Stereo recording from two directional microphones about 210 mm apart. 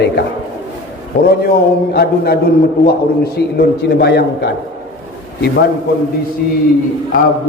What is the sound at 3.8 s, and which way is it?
Speech, 50° left (ahead or behind).